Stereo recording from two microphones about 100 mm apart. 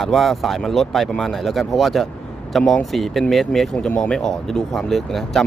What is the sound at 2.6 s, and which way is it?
Speech, 10° left (ahead or behind).